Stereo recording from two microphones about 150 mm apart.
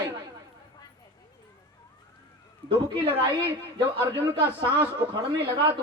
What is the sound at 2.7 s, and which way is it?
A woman's voice, 40° right (ahead or behind).